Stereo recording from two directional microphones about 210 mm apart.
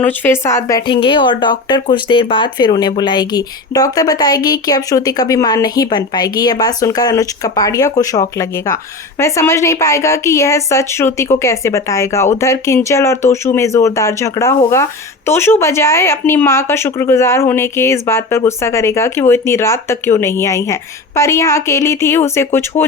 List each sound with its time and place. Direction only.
0.0 s speech: 10° left (ahead or behind)